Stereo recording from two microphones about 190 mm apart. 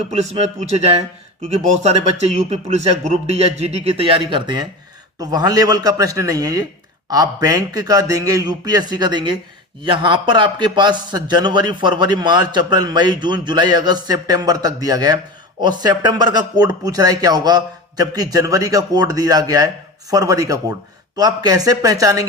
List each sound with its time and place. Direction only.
0.1 s a man's voice: 35° right (ahead or behind); by 22.2 s 20° right (ahead or behind)